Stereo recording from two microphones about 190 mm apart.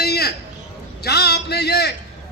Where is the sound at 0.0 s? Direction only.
55° left (ahead or behind).